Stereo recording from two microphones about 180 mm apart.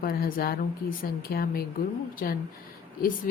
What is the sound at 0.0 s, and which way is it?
A woman's voice, 55° left (ahead or behind).